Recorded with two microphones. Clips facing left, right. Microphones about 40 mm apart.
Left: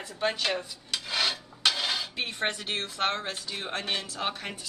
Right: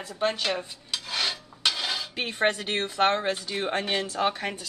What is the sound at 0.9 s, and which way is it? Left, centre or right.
Filing, centre.